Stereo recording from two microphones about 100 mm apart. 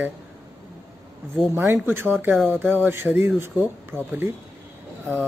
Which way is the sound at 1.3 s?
20° right (ahead or behind).